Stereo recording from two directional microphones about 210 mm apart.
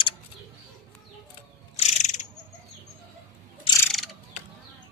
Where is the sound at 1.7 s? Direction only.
35° left (ahead or behind).